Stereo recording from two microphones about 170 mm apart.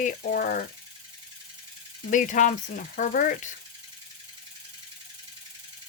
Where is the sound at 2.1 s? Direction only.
50° left (ahead or behind).